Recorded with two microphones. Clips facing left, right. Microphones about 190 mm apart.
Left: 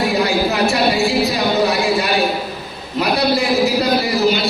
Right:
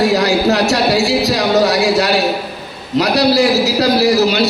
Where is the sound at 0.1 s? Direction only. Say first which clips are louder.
Right 4 dB; 80° right.